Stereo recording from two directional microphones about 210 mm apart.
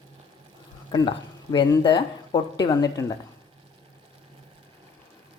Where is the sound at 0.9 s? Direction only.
20° left (ahead or behind).